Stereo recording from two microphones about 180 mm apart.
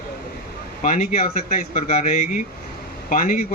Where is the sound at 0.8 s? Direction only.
45° left (ahead or behind).